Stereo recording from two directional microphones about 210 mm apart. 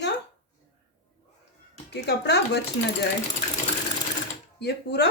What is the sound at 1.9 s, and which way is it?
Speech, 50° left (ahead or behind).